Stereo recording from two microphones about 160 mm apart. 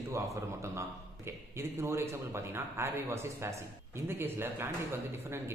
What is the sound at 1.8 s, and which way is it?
Speech, 15° right (ahead or behind).